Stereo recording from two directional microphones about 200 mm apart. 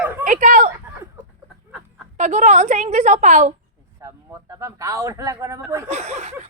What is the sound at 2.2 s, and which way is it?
A woman's voice, 35° right (ahead or behind).